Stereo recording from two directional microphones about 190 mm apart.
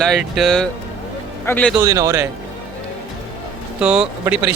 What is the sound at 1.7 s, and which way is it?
Speech, 20° right (ahead or behind).